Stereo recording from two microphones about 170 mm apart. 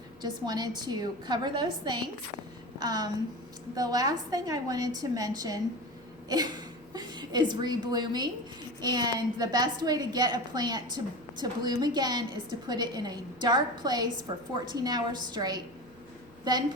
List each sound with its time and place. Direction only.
0.2 s a woman's voice: 25° right (ahead or behind)
6.2 s a sound: 20° right (ahead or behind)
6.9 s a woman's voice: 25° right (ahead or behind)